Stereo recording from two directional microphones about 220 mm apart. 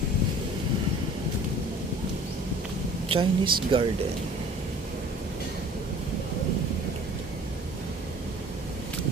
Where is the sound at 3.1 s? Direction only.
25° right (ahead or behind).